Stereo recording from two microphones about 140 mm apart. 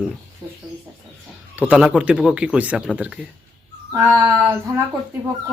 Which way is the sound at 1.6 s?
10° right (ahead or behind).